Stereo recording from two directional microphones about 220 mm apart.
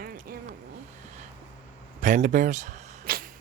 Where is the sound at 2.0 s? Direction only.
35° right (ahead or behind).